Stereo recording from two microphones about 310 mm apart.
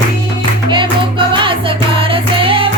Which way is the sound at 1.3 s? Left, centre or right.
Centre.